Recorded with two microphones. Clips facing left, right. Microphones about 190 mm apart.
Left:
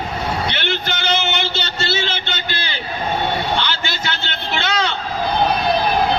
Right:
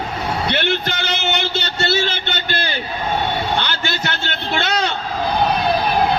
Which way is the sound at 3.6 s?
55° right (ahead or behind).